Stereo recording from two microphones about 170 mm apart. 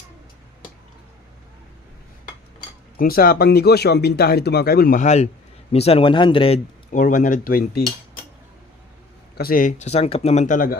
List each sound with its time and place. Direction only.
3.0 s speech: 60° left (ahead or behind)
4.9 s speech: 40° left (ahead or behind)
6.9 s speech: 50° left (ahead or behind)
9.4 s speech: 55° left (ahead or behind)